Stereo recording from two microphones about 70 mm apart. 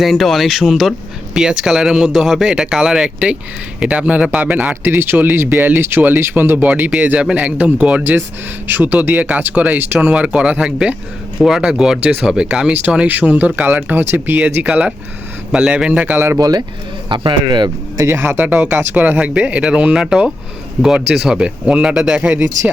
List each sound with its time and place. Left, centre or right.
0.0 s a man's voice: centre; by 14.7 s right
14.7 s a man's voice: centre
16.1 s speech: right
16.4 s speech: right
17.1 s speech: right
17.9 s speech: right; by 22.4 s centre
22.4 s a man's voice: right